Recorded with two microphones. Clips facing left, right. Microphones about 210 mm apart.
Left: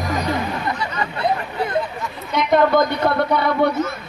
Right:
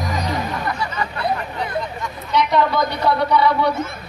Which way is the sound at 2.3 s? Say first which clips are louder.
Left 3 dB; 50° left (ahead or behind).